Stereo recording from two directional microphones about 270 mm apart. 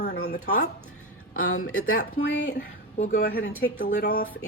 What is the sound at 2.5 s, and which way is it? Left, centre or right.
A woman's voice, left.